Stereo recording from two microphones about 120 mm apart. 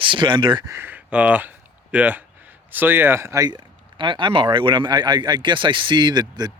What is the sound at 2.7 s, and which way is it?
Speech, 15° right (ahead or behind).